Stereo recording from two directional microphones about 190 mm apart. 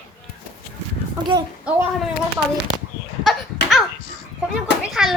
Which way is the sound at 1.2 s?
25° right (ahead or behind).